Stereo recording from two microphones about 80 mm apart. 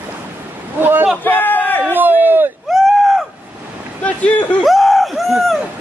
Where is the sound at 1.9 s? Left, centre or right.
Right.